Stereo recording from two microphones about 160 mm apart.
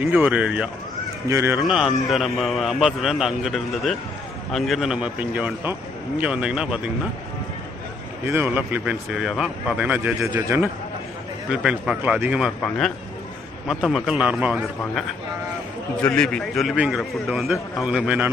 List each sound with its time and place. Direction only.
0.0 s speech: 10° right (ahead or behind)
1.6 s a man's voice: 5° right (ahead or behind)
8.3 s speech: 15° right (ahead or behind)
11.5 s speech: 5° right (ahead or behind)
13.7 s a man's voice: centre (ahead or behind)
16.0 s a man's voice: 5° left (ahead or behind)